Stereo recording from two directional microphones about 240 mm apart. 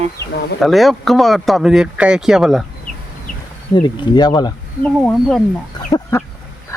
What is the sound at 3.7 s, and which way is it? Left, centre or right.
Speech, centre.